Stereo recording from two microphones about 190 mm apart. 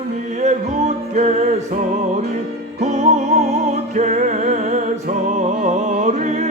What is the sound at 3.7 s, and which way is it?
Music, 40° right (ahead or behind).